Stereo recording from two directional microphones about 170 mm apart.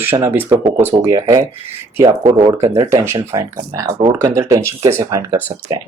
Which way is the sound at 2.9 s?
15° right (ahead or behind).